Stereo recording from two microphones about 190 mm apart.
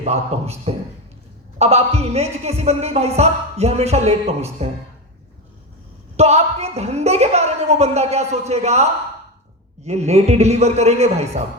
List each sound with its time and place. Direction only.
0.0 s a man's voice: 35° right (ahead or behind)
6.1 s a man's voice: 35° right (ahead or behind)